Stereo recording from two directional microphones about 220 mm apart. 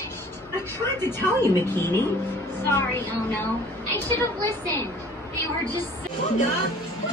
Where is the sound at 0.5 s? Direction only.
10° left (ahead or behind).